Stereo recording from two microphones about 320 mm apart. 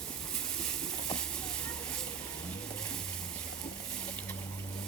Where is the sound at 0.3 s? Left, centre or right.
Centre.